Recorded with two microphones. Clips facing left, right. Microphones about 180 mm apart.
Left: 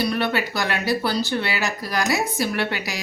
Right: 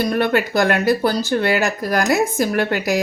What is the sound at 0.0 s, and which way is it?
Speech, 50° right (ahead or behind).